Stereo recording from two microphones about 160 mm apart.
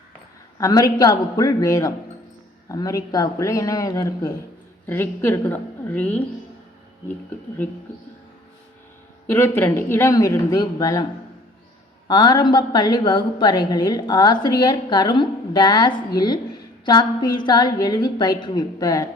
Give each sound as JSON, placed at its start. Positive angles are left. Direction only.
{"t": 0.6, "sound": "a woman's voice", "side_deg": 20}
{"t": 9.2, "sound": "speech", "side_deg": 15}
{"t": 12.0, "sound": "a woman's voice", "side_deg": 25}